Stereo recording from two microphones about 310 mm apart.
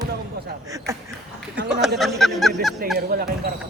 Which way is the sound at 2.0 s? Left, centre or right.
Centre.